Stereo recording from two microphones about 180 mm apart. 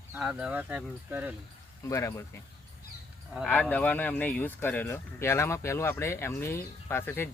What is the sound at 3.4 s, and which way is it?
Speech, 10° left (ahead or behind).